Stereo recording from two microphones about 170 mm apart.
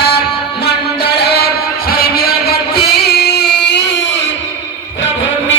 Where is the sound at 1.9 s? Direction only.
65° left (ahead or behind); by 3.9 s 90° left.